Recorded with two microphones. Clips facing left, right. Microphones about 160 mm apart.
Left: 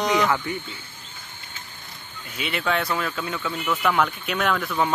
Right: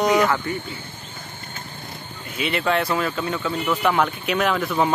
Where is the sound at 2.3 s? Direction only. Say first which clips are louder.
Right 4 dB; centre (ahead or behind).